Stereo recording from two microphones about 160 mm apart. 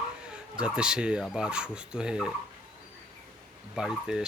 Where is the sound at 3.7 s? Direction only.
5° right (ahead or behind).